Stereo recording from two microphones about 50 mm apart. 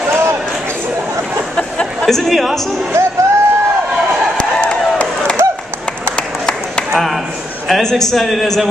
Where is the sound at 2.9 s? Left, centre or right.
Right.